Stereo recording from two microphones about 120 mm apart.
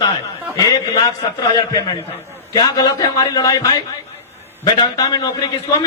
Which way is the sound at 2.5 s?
30° left (ahead or behind).